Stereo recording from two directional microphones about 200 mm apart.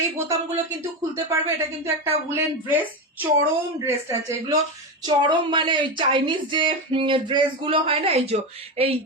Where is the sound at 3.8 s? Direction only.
15° right (ahead or behind).